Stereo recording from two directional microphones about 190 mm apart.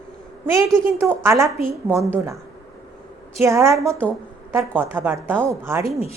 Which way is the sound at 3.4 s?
15° right (ahead or behind).